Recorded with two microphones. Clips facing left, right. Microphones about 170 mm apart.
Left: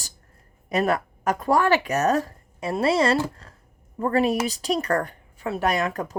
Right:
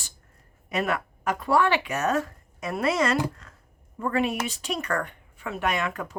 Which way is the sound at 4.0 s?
35° left (ahead or behind).